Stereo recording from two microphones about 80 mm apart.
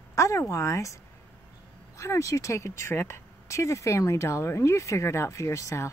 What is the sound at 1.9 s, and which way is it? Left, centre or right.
Speech, left.